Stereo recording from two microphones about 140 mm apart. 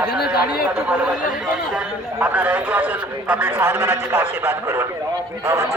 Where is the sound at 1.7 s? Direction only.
15° right (ahead or behind).